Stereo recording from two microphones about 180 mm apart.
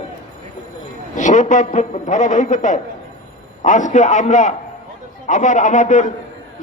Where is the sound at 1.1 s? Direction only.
45° left (ahead or behind).